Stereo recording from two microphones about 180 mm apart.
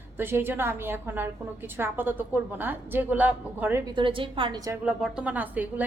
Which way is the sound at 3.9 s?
30° right (ahead or behind).